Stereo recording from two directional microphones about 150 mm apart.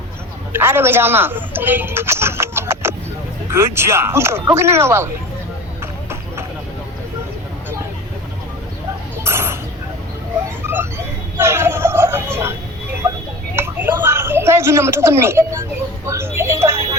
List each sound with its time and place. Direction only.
0.5 s a woman's voice: 15° right (ahead or behind)
9.2 s a sound: 15° right (ahead or behind)
11.3 s speech: 15° right (ahead or behind)
13.6 s speech: 15° right (ahead or behind)